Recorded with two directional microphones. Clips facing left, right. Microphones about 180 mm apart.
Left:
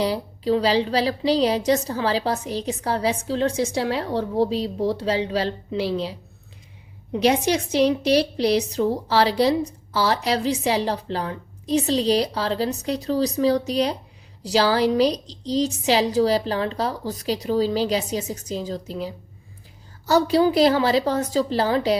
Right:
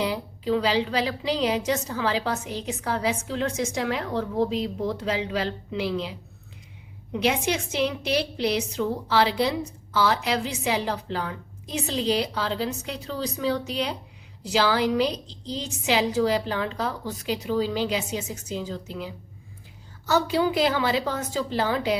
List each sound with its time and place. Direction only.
0.0 s a woman's voice: 35° left (ahead or behind)